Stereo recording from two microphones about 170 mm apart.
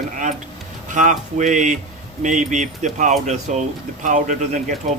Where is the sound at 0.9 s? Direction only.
45° right (ahead or behind).